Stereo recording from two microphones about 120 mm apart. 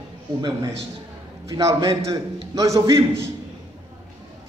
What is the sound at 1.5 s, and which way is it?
A man's voice, 25° right (ahead or behind).